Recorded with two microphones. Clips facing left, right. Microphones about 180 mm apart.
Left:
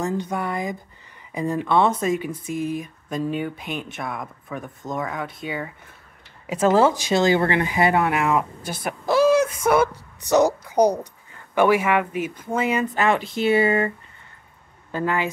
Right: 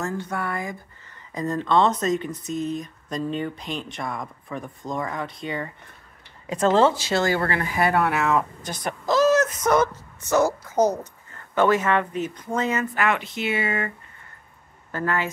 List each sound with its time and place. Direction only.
0.0 s speech: 15° left (ahead or behind); by 13.9 s 30° left (ahead or behind)
14.9 s speech: 15° left (ahead or behind)